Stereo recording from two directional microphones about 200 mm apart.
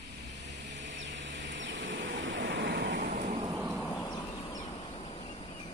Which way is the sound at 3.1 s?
40° right (ahead or behind).